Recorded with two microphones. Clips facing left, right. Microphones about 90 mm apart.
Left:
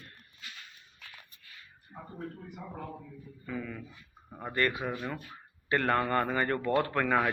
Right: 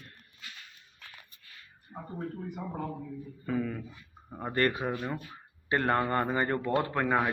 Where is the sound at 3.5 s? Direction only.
35° right (ahead or behind).